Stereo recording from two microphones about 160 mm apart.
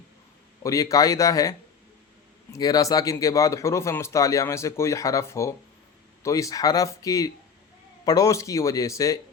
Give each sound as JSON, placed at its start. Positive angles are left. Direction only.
{"t": 0.6, "sound": "speech", "side_deg": 20}